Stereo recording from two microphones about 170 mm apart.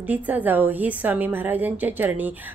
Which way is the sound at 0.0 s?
10° right (ahead or behind).